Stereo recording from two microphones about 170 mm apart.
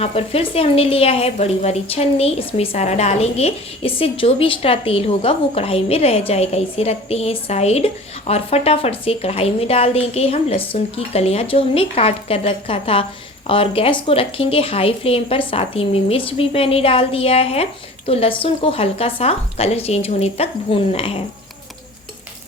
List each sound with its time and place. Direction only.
0.0 s a woman's voice: 35° left (ahead or behind)